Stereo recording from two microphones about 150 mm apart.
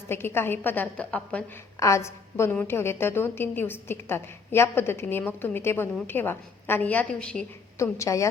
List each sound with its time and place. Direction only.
0.1 s a woman's voice: 15° left (ahead or behind)
1.8 s a woman's voice: 20° left (ahead or behind)
7.8 s a woman's voice: 20° left (ahead or behind)